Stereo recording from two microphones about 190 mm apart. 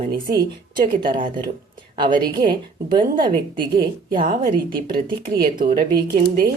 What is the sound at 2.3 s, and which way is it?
Speech, 25° right (ahead or behind).